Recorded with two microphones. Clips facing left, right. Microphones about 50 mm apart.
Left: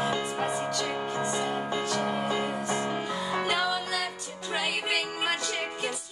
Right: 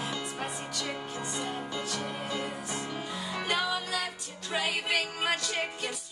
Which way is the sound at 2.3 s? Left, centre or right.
Left.